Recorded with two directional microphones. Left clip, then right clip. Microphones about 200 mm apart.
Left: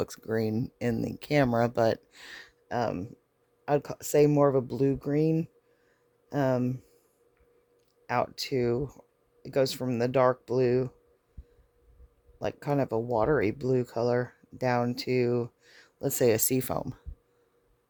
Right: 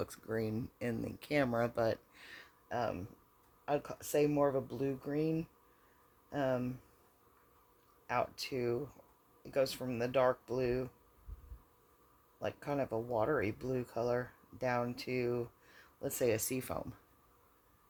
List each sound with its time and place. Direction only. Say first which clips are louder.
0.0 s speech: left 8 dB; 45° left (ahead or behind)
8.0 s speech: left 7 dB; 55° left (ahead or behind)
12.4 s speech: left 8 dB; 55° left (ahead or behind)